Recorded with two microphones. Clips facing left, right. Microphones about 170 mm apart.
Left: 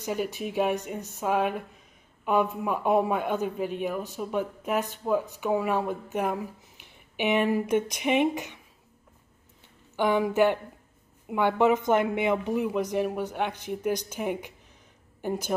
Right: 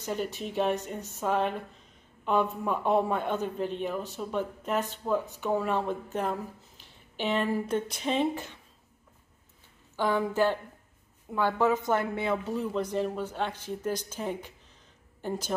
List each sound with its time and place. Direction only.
0.0 s a man's voice: 10° left (ahead or behind)
9.9 s a man's voice: 20° left (ahead or behind)